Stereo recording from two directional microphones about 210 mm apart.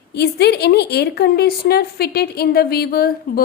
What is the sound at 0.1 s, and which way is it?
A woman's voice, 50° left (ahead or behind).